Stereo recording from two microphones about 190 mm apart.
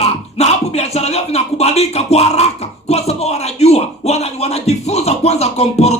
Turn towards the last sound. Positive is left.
turn(degrees=35)  # may be behind; listen again after turning